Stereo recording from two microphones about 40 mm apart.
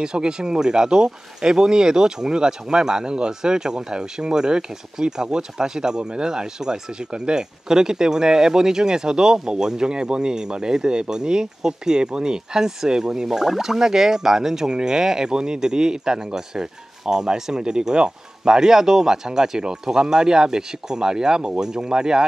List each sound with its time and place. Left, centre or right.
0.0 s speech: right